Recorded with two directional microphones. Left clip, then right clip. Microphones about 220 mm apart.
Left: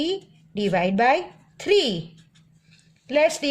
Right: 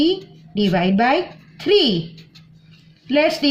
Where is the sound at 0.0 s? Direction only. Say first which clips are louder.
Right 8 dB; 45° left (ahead or behind).